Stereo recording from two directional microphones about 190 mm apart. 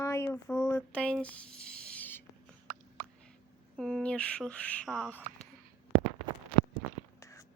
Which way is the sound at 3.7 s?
5° left (ahead or behind).